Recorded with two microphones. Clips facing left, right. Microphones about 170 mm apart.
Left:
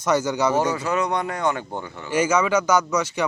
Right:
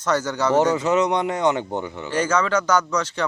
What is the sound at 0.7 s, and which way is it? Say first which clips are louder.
Speech: right 4 dB; 20° right (ahead or behind).